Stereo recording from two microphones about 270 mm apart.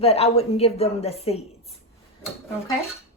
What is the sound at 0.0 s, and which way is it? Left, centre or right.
A woman's voice, left.